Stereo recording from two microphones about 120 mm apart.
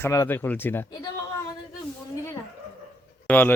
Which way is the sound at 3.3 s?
15° left (ahead or behind).